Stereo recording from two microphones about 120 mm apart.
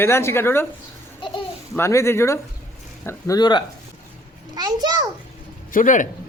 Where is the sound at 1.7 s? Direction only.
25° left (ahead or behind).